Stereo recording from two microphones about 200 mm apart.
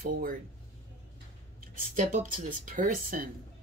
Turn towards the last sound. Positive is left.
turn(degrees=-45)  # may be behind; listen again after turning